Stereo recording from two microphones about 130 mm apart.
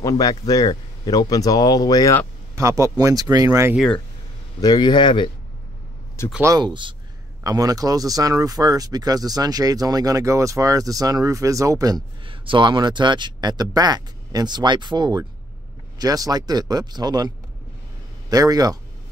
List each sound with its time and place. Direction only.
0.0 s a man's voice: 30° left (ahead or behind)
2.5 s speech: 25° right (ahead or behind)
4.6 s a man's voice: 30° left (ahead or behind)
6.4 s speech: 30° right (ahead or behind)
12.3 s speech: 40° right (ahead or behind)
18.3 s speech: 30° right (ahead or behind)